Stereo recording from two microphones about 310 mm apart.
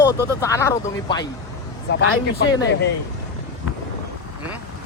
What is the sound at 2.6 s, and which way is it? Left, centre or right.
Speech, left.